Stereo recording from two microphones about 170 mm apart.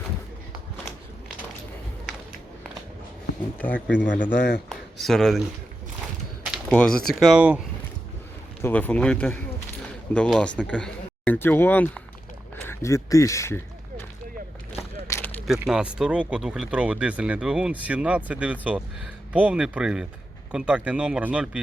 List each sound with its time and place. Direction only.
3.6 s speech: 10° left (ahead or behind)
4.7 s a sound: centre (ahead or behind)
6.7 s speech: 5° left (ahead or behind)
8.6 s speech: 10° left (ahead or behind)
15.0 s a sound: 15° left (ahead or behind)
15.4 s speech: 5° right (ahead or behind)